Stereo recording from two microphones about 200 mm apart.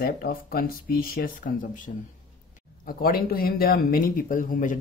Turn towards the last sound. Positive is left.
turn(degrees=40)  # may be behind; listen again after turning